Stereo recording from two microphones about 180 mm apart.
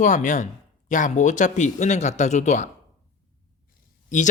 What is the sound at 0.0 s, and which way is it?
Speech, 45° left (ahead or behind).